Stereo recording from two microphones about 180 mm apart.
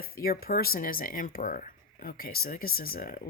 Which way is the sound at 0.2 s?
55° left (ahead or behind).